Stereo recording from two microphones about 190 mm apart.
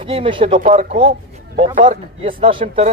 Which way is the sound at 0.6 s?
40° right (ahead or behind).